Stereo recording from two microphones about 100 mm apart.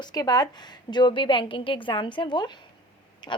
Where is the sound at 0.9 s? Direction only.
50° left (ahead or behind).